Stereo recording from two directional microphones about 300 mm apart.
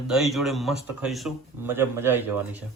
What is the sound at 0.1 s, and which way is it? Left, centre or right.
Speech, centre.